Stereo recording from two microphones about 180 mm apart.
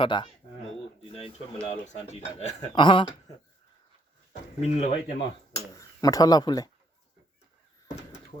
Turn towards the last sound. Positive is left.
turn(degrees=20)  # may be behind; listen again after turning